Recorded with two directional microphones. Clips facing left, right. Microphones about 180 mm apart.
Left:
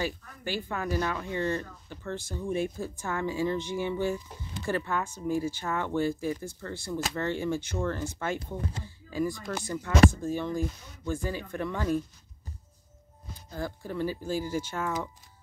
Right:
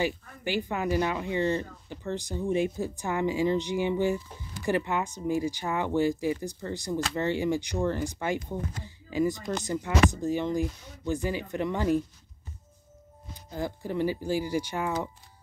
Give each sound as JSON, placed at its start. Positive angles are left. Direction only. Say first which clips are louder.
{"t": 0.0, "sound": "speech", "louder": "right 3 dB", "side_deg": -15}
{"t": 8.4, "sound": "speech", "louder": "right 2 dB", "side_deg": 30}
{"t": 8.8, "sound": "speech", "louder": "right 4 dB", "side_deg": -20}
{"t": 13.5, "sound": "speech", "louder": "right 3 dB", "side_deg": -15}